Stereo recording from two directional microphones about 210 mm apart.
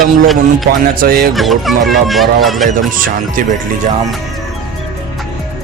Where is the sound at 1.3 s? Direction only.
Centre (ahead or behind).